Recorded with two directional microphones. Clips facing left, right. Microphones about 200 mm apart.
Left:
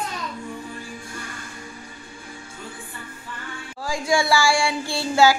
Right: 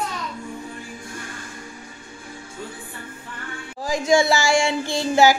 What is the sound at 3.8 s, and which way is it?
Child singing, 20° right (ahead or behind).